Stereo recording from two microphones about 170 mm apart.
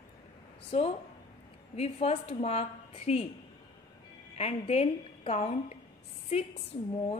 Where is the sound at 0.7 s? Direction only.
35° left (ahead or behind).